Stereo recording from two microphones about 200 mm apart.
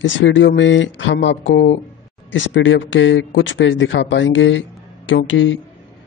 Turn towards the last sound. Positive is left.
turn(degrees=70)  # may be behind; listen again after turning